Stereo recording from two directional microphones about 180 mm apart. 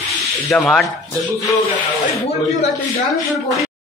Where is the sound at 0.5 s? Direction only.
Centre (ahead or behind).